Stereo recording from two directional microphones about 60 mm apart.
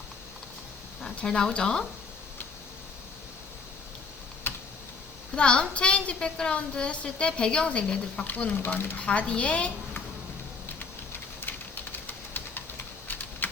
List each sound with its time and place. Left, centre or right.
1.2 s speech: centre
4.4 s typing: left
5.3 s a woman's voice: centre
8.6 s speech: left
9.0 s a woman's voice: centre
11.4 s typing: left